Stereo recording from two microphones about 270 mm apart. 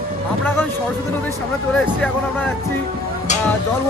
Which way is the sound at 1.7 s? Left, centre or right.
Centre.